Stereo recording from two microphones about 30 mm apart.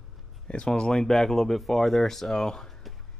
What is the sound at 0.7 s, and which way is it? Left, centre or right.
Speech, centre.